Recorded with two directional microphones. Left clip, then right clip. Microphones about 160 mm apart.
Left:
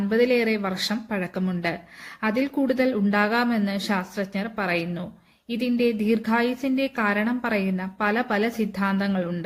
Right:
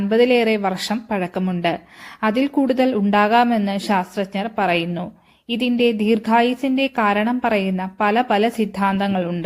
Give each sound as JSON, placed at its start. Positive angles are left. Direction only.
{"t": 0.1, "sound": "a woman's voice", "side_deg": -30}